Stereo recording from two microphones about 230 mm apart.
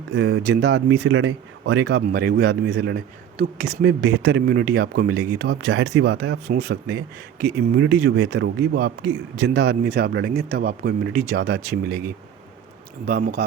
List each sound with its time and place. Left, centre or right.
0.1 s speech: right